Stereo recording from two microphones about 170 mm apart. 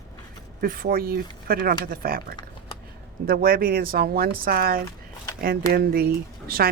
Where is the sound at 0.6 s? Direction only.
60° right (ahead or behind).